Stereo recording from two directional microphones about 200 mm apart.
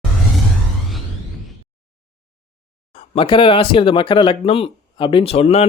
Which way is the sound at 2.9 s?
30° left (ahead or behind).